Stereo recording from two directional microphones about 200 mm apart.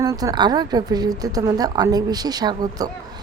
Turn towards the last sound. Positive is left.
turn(degrees=-20)  # may be behind; listen again after turning